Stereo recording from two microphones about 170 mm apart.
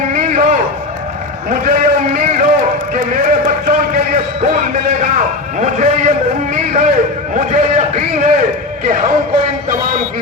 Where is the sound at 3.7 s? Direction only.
50° right (ahead or behind).